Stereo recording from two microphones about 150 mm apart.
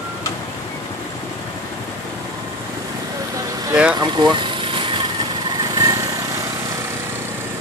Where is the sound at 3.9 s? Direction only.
30° right (ahead or behind).